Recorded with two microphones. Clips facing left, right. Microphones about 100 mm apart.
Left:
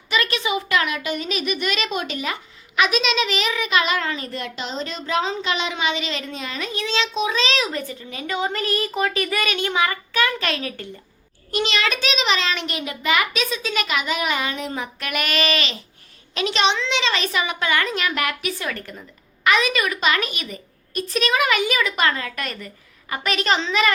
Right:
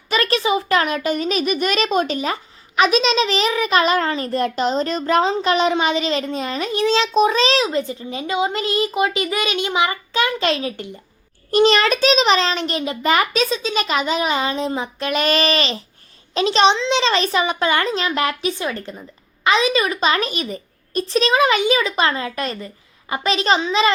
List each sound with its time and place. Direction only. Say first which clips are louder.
0.1 s a child's voice: right 4 dB; 35° right (ahead or behind)
7.7 s a woman's voice: right 7 dB; 25° right (ahead or behind)
11.5 s a child's voice: right 8 dB; 40° right (ahead or behind)
13.6 s a woman's voice: right 3 dB; 25° right (ahead or behind)
13.8 s a woman's voice: right 4 dB; 35° right (ahead or behind)